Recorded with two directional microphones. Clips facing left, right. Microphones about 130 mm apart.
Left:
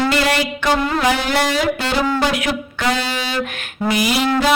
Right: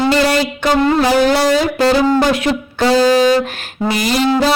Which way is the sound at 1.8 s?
40° right (ahead or behind).